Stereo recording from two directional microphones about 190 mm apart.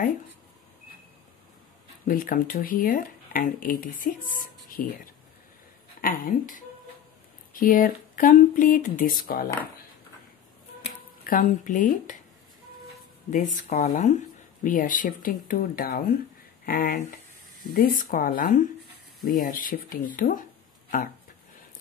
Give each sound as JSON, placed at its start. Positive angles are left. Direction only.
{"t": 2.0, "sound": "speech", "side_deg": 45}
{"t": 5.9, "sound": "speech", "side_deg": 45}
{"t": 11.2, "sound": "speech", "side_deg": 45}
{"t": 13.3, "sound": "speech", "side_deg": 40}